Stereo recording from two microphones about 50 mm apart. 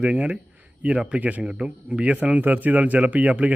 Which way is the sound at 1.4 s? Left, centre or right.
Centre.